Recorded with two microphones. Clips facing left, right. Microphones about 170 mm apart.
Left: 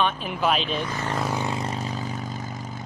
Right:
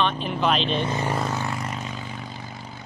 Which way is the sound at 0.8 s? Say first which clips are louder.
Right 4 dB; 25° right (ahead or behind).